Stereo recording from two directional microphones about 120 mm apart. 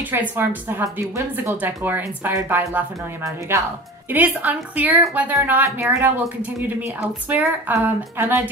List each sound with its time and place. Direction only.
0.1 s a woman's voice: 15° right (ahead or behind)